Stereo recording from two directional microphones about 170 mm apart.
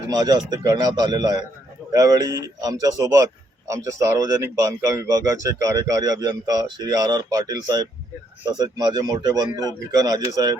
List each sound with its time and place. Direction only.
0.1 s a man's voice: 25° right (ahead or behind)